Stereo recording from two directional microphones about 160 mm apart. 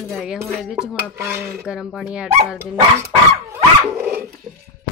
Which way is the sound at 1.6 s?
5° right (ahead or behind).